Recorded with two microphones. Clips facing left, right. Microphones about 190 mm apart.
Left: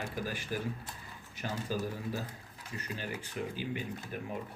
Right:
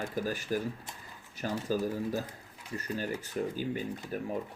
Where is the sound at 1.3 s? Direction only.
40° right (ahead or behind).